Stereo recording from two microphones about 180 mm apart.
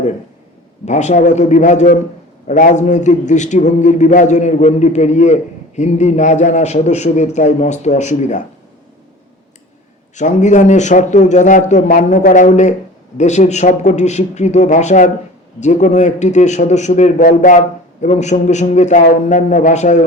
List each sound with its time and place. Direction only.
0.9 s a man's voice: 40° left (ahead or behind)
10.2 s a man's voice: 40° left (ahead or behind)